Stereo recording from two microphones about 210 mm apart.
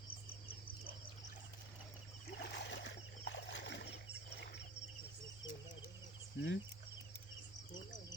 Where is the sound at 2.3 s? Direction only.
55° left (ahead or behind).